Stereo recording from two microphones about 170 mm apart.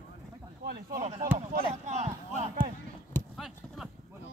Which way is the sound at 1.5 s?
45° right (ahead or behind).